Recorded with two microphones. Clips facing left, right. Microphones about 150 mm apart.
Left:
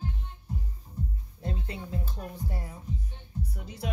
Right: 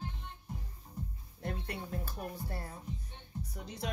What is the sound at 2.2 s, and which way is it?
Speech, 10° right (ahead or behind).